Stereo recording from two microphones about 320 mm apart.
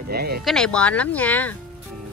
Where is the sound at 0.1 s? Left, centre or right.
Right.